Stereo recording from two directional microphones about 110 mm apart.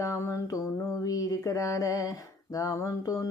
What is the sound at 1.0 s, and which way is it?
Mantra, 30° left (ahead or behind).